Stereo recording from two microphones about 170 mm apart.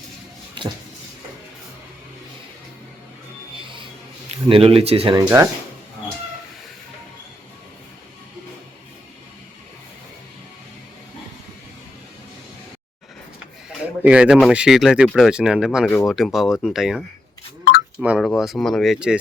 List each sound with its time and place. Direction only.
4.3 s speech: 35° right (ahead or behind)
14.0 s speech: 5° right (ahead or behind)
18.0 s speech: 5° right (ahead or behind)